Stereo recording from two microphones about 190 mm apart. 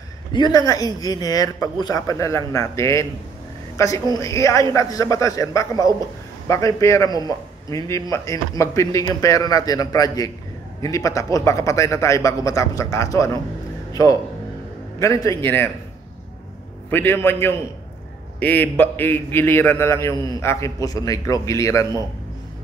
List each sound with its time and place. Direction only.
0.3 s a man's voice: 20° left (ahead or behind)
15.0 s a man's voice: 15° left (ahead or behind)
16.9 s a man's voice: 10° left (ahead or behind)